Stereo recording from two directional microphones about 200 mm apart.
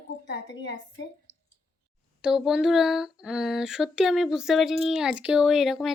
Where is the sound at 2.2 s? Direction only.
Centre (ahead or behind).